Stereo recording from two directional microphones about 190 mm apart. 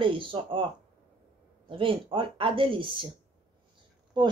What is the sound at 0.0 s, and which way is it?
Speech, 25° right (ahead or behind).